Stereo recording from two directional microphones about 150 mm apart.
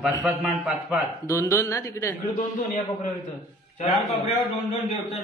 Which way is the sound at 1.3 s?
20° left (ahead or behind).